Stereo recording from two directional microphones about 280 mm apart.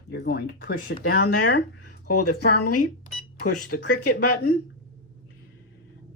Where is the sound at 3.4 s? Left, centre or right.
Left.